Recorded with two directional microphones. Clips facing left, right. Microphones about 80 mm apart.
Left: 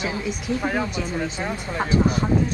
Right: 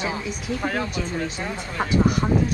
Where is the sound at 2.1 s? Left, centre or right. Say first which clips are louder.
Even; centre.